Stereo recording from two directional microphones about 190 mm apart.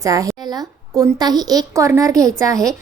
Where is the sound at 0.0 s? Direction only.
20° right (ahead or behind).